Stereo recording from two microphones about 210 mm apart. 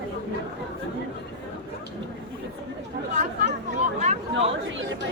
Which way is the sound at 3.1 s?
35° right (ahead or behind).